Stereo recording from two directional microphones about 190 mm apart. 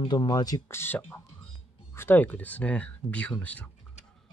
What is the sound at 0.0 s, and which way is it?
Speech, 25° left (ahead or behind).